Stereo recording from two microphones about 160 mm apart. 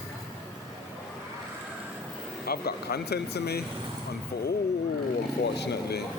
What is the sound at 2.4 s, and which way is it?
Speech, 75° left (ahead or behind).